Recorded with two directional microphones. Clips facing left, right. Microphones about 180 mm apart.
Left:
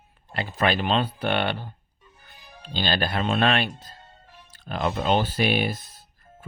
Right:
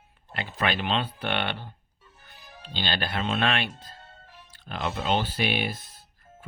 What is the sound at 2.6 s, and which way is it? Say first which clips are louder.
Speech: left 5 dB; 40° left (ahead or behind).